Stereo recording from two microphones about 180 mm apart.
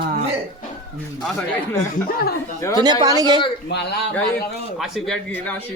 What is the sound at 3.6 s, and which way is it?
Speech, 65° left (ahead or behind).